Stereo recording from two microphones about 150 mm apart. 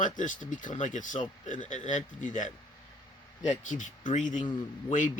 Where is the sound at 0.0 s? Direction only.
60° left (ahead or behind).